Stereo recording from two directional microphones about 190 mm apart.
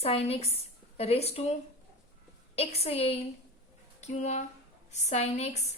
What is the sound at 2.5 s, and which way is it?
A woman's voice, 30° left (ahead or behind).